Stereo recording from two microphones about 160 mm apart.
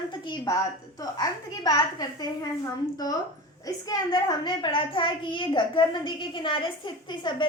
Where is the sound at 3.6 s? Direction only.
25° left (ahead or behind).